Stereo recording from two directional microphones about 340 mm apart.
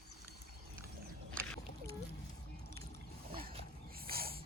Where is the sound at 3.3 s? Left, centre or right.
Centre.